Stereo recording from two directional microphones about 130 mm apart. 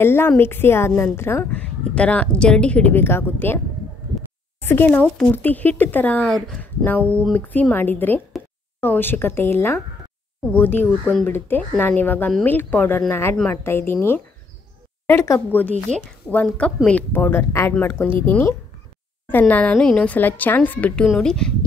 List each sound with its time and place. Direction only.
0.0 s a woman's voice: 20° left (ahead or behind)
5.0 s a woman's voice: 5° left (ahead or behind)
6.6 s a woman's voice: 15° left (ahead or behind)
15.0 s a woman's voice: 20° left (ahead or behind)
19.3 s a woman's voice: 10° left (ahead or behind)